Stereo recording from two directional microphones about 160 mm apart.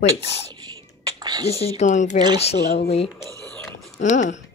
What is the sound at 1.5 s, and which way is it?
Speech, 40° left (ahead or behind).